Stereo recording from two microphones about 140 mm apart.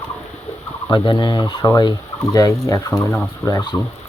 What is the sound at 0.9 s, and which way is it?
Speech, 35° left (ahead or behind).